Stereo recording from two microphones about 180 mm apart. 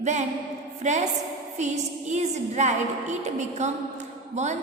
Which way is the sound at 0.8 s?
40° right (ahead or behind).